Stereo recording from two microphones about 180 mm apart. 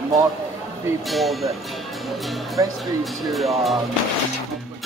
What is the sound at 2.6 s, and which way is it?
Speech, 20° right (ahead or behind).